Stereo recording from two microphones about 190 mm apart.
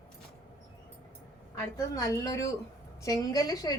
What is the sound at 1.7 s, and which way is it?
A man's voice, 15° left (ahead or behind).